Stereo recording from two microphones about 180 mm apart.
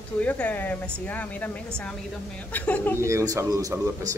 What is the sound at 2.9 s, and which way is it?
Speech, 15° right (ahead or behind).